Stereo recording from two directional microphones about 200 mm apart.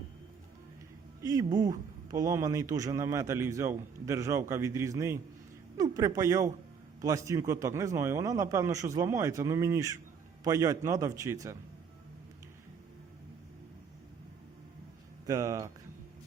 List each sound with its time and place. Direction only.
1.2 s speech: 20° right (ahead or behind)
15.3 s speech: 15° right (ahead or behind)